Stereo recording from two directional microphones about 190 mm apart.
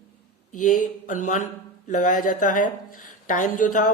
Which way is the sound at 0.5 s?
45° left (ahead or behind).